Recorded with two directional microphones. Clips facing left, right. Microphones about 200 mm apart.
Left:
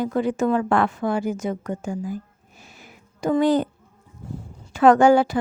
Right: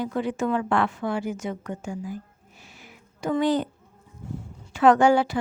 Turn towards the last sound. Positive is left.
turn(degrees=45)  # may be behind; listen again after turning